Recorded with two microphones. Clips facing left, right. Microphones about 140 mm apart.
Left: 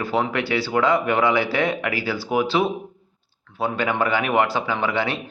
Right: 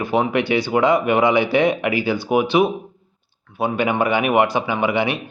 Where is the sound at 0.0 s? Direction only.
20° right (ahead or behind).